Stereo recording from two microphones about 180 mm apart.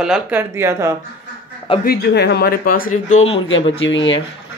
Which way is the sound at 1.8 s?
65° left (ahead or behind).